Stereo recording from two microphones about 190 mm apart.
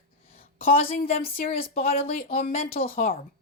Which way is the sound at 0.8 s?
30° left (ahead or behind).